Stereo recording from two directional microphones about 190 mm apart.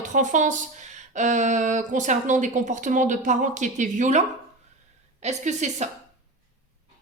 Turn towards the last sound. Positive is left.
turn(degrees=-40)  # may be behind; listen again after turning